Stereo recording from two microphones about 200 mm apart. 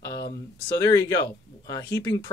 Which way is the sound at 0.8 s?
20° left (ahead or behind).